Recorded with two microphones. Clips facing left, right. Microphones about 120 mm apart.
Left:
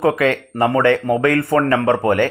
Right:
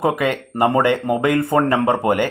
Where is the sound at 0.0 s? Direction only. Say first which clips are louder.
Left 3 dB; 15° right (ahead or behind).